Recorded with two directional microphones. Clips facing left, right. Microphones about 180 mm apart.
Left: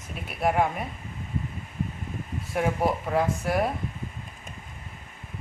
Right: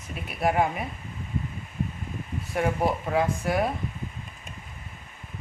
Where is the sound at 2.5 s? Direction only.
Centre (ahead or behind).